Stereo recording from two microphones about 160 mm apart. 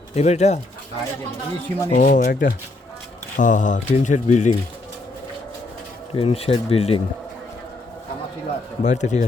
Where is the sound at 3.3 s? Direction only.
50° left (ahead or behind).